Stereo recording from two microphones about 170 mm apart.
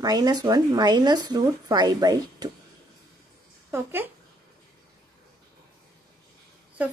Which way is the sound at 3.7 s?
10° right (ahead or behind).